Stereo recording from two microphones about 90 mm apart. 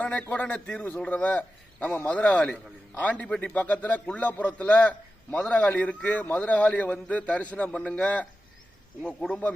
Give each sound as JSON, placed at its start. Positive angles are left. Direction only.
{"t": 0.0, "sound": "a man's voice", "side_deg": 15}